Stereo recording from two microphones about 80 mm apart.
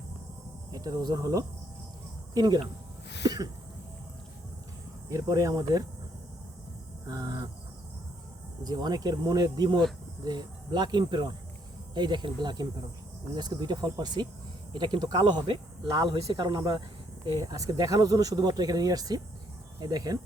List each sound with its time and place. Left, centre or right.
0.7 s speech: right
2.3 s speech: right
5.0 s speech: right
7.1 s speech: right
8.6 s speech: right
17.4 s speech: right